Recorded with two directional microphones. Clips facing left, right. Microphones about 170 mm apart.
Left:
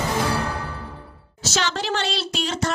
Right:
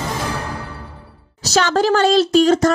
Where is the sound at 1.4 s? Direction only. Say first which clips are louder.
Right 9 dB; 45° right (ahead or behind).